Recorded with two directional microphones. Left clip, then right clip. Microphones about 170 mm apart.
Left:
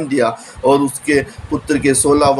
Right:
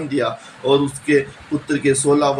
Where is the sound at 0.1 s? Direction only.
45° left (ahead or behind).